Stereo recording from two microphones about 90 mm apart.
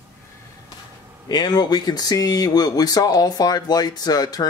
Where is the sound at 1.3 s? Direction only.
50° left (ahead or behind).